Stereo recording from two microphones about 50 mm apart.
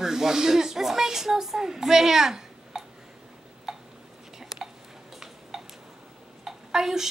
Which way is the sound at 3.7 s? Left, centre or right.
Centre.